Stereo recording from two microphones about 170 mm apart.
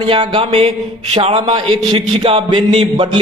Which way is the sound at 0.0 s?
30° right (ahead or behind).